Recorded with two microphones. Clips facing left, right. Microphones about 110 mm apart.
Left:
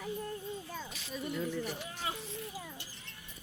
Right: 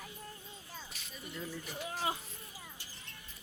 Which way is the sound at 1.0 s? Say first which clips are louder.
Left 10 dB; 90° left.